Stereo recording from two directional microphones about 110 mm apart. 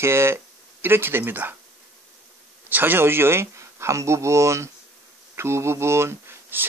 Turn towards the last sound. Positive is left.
turn(degrees=-20)  # may be behind; listen again after turning